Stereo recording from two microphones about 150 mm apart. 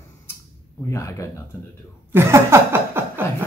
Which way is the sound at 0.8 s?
20° left (ahead or behind).